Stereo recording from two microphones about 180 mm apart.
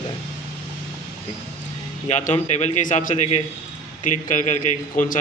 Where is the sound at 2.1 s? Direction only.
40° left (ahead or behind).